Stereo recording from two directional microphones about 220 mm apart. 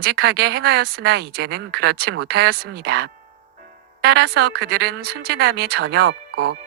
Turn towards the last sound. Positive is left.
turn(degrees=-50)  # may be behind; listen again after turning